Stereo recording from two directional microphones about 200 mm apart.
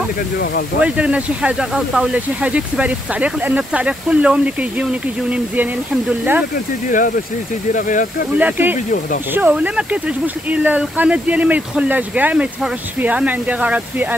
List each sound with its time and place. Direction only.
0.7 s speech: 5° right (ahead or behind)
6.9 s speech: 40° left (ahead or behind)
8.4 s speech: 10° right (ahead or behind)